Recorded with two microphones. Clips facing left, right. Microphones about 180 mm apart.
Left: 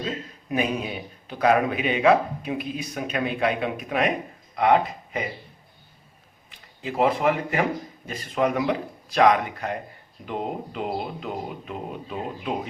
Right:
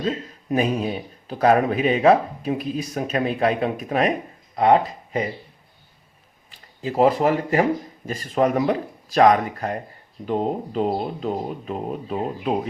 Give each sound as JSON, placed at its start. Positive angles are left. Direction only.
{"t": 0.5, "sound": "a man's voice", "side_deg": -40}
{"t": 6.5, "sound": "a man's voice", "side_deg": -40}